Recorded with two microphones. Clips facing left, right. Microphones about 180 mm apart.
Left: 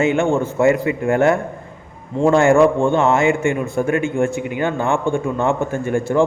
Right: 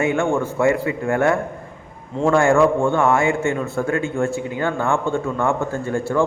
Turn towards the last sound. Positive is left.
turn(degrees=15)  # may be behind; listen again after turning